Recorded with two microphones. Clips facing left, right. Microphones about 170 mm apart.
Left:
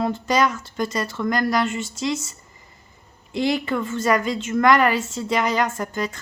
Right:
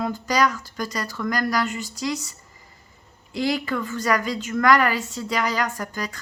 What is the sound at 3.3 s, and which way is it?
Speech, 25° left (ahead or behind).